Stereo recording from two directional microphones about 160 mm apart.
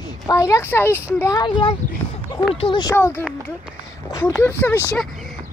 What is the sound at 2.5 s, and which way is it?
Speech, 30° left (ahead or behind).